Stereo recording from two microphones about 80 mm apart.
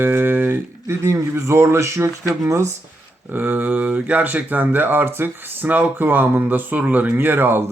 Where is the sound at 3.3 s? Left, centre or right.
Right.